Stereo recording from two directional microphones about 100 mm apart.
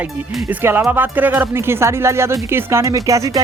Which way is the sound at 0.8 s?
15° right (ahead or behind).